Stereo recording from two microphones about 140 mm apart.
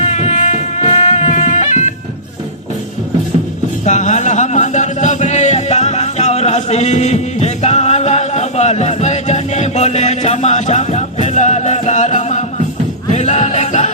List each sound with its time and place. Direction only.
0.0 s music: 50° left (ahead or behind)
3.8 s music: 55° left (ahead or behind)